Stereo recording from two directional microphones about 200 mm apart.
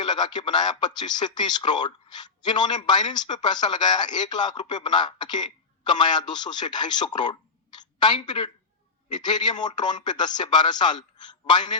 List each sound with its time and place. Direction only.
0.0 s a woman's voice: 20° left (ahead or behind)